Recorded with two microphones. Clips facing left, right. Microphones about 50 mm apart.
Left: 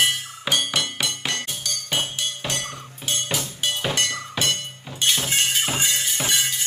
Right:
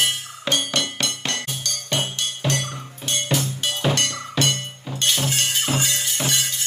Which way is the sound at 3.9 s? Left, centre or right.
Centre.